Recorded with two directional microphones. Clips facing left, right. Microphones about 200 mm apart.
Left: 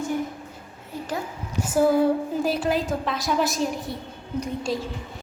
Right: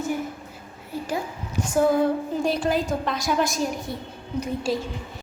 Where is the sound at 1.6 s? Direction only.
5° left (ahead or behind).